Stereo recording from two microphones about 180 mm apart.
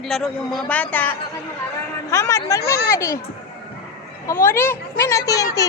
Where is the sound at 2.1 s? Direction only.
15° left (ahead or behind).